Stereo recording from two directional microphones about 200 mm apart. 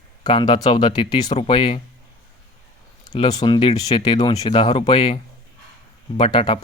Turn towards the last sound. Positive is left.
turn(degrees=30)  # may be behind; listen again after turning